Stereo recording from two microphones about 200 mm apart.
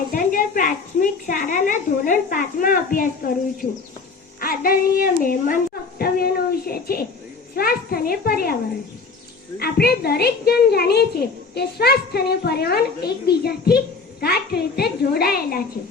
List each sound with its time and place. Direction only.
0.1 s a child's voice: 45° left (ahead or behind)
4.4 s music: 45° left (ahead or behind)
5.2 s a child's voice: 45° left (ahead or behind)
9.6 s a child's voice: 50° left (ahead or behind)